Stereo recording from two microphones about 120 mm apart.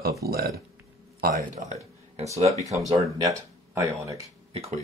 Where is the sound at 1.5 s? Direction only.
85° right.